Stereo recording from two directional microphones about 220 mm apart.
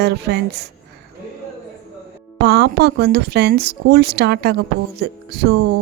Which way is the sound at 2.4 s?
45° right (ahead or behind).